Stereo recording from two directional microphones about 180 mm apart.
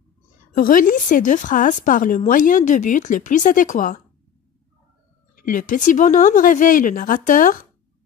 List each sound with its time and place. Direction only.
0.6 s a woman's voice: 50° left (ahead or behind)
5.3 s a woman's voice: 50° left (ahead or behind)